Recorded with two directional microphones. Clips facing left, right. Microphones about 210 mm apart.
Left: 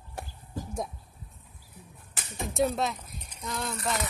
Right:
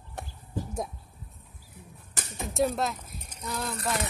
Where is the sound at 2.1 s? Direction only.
40° right (ahead or behind).